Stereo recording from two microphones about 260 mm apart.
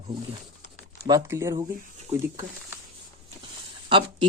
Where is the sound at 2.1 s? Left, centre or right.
Right.